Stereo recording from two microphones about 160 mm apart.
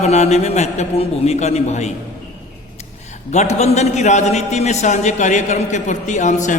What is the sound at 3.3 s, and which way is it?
A man's voice, 45° left (ahead or behind).